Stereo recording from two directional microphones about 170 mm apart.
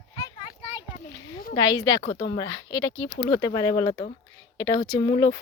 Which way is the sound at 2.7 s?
90° left.